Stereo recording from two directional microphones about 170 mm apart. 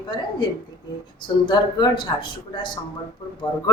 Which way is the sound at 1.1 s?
30° left (ahead or behind).